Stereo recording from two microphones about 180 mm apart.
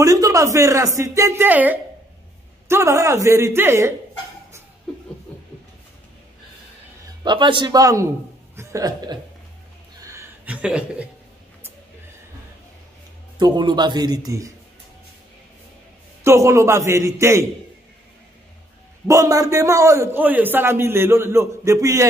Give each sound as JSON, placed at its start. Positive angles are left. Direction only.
{"t": 0.0, "sound": "a man's voice", "side_deg": -20}
{"t": 7.2, "sound": "a man's voice", "side_deg": -25}
{"t": 10.0, "sound": "a sound", "side_deg": -10}
{"t": 13.4, "sound": "a man's voice", "side_deg": -25}
{"t": 16.3, "sound": "a man's voice", "side_deg": -15}
{"t": 19.0, "sound": "a man's voice", "side_deg": -20}